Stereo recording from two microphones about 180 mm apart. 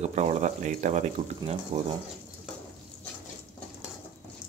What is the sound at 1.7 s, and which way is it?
Speech, 30° right (ahead or behind).